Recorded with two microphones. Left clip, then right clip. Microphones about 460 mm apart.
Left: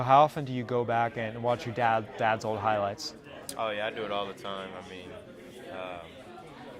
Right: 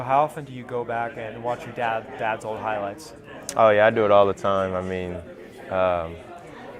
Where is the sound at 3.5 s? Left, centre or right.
Right.